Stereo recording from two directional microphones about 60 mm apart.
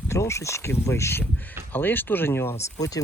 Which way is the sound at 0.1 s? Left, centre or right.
Left.